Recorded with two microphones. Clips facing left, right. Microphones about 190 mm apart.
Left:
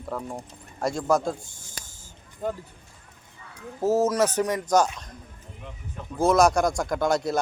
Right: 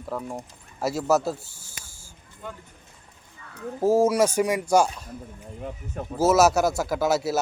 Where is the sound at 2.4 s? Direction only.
40° left (ahead or behind).